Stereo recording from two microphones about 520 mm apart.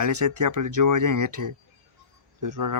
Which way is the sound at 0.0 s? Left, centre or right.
Right.